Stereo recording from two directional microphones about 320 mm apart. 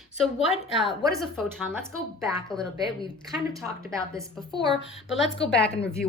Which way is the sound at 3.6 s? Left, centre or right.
Centre.